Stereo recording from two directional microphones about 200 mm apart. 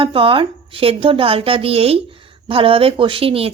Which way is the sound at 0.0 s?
25° right (ahead or behind).